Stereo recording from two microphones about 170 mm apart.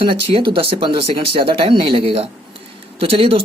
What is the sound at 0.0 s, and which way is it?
Speech, 30° right (ahead or behind).